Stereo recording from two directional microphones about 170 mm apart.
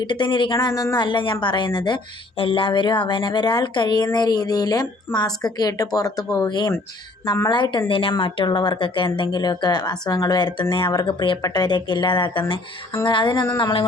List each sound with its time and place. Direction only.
0.0 s speech: 25° left (ahead or behind)